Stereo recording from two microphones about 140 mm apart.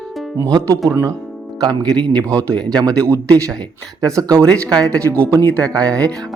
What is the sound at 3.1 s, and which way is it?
Speech, 20° right (ahead or behind).